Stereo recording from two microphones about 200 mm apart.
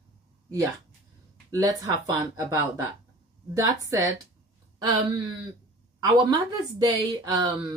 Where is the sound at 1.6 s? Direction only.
15° right (ahead or behind).